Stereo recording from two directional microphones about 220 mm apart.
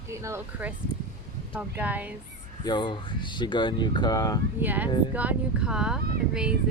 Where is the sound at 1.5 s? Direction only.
5° right (ahead or behind).